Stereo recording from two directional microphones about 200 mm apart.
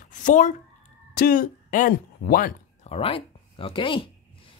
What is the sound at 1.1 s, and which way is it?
Speech, 45° left (ahead or behind).